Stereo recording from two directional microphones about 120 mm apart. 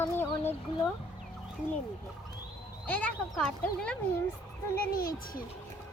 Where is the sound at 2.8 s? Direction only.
10° left (ahead or behind).